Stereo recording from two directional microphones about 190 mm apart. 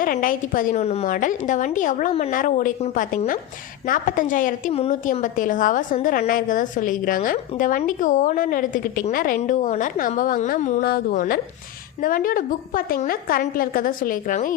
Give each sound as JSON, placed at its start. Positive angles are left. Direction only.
{"t": 0.0, "sound": "a woman's voice", "side_deg": 45}